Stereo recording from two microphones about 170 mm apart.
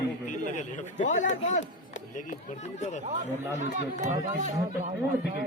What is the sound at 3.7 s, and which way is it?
Speech, 45° right (ahead or behind).